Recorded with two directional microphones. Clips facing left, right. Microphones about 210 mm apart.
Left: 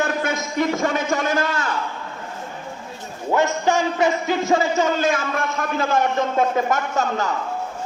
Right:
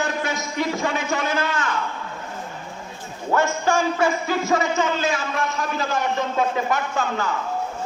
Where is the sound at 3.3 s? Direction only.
20° left (ahead or behind).